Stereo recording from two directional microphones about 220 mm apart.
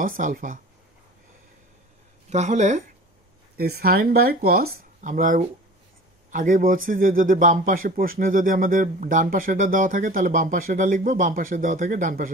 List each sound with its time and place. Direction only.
0.0 s speech: 40° right (ahead or behind)
2.2 s speech: 30° right (ahead or behind)
3.5 s speech: 45° right (ahead or behind)